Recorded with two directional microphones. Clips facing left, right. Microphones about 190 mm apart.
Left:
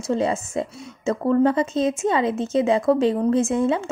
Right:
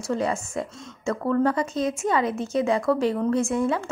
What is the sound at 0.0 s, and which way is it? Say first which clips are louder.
A woman's voice: left 3 dB; 25° left (ahead or behind).